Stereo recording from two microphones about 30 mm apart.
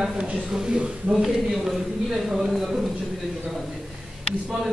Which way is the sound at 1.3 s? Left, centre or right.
Centre.